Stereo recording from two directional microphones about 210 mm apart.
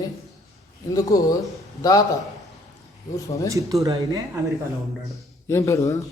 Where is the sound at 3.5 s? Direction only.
15° right (ahead or behind).